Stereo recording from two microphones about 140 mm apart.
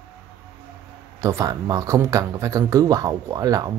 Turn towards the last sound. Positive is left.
turn(degrees=-25)  # may be behind; listen again after turning